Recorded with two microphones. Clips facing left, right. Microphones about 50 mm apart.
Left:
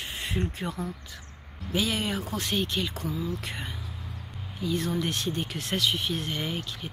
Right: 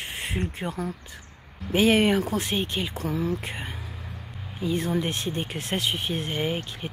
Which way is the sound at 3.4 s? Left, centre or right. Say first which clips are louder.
Right 2 dB; right.